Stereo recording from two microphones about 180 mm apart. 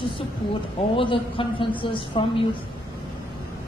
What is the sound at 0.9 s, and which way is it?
A man's voice, 30° left (ahead or behind).